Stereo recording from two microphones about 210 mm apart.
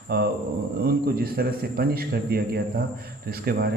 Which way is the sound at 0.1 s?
45° right (ahead or behind).